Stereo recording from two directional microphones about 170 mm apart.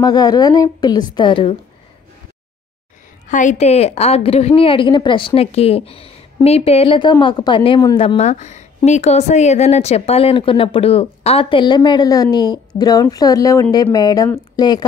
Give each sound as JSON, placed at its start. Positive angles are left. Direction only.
{"t": 0.0, "sound": "a woman's voice", "side_deg": 25}
{"t": 3.3, "sound": "a woman's voice", "side_deg": 50}